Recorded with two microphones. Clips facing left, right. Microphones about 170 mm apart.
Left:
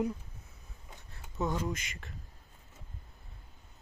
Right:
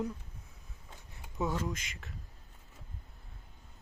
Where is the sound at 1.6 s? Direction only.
Centre (ahead or behind).